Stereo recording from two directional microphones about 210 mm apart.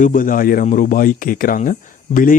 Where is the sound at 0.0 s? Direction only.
40° left (ahead or behind).